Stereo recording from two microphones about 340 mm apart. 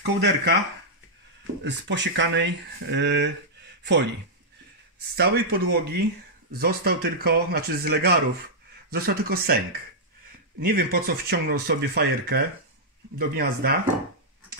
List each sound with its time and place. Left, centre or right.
0.0 s speech: right
1.6 s speech: right
5.1 s speech: right